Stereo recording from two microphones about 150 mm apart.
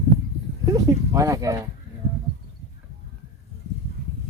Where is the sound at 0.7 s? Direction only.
25° right (ahead or behind).